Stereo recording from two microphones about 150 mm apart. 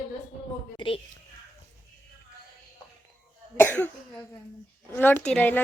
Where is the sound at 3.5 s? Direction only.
15° left (ahead or behind).